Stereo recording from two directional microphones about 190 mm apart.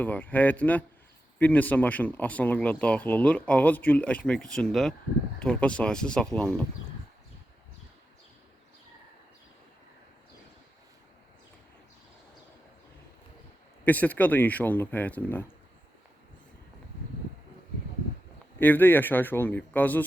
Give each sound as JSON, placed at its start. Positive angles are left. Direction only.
{"t": 0.0, "sound": "speech", "side_deg": 10}
{"t": 13.8, "sound": "speech", "side_deg": 10}
{"t": 18.6, "sound": "speech", "side_deg": 10}